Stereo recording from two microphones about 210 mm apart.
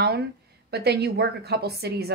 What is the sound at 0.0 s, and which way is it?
A woman's voice, 50° right (ahead or behind).